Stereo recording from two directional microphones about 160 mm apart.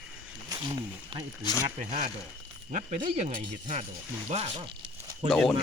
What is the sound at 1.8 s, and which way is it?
Speech, 55° right (ahead or behind).